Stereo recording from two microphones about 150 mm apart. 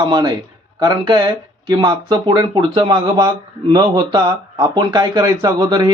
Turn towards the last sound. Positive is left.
turn(degrees=-25)  # may be behind; listen again after turning